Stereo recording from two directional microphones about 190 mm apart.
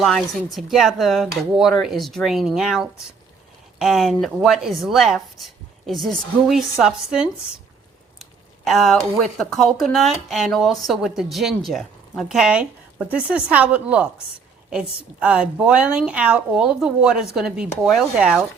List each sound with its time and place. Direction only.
0.0 s speech: centre (ahead or behind)